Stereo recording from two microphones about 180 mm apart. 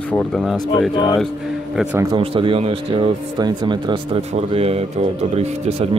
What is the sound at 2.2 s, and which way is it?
Speech, 30° right (ahead or behind).